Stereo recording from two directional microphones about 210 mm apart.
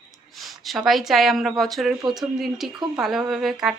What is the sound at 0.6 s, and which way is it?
Speech, centre (ahead or behind).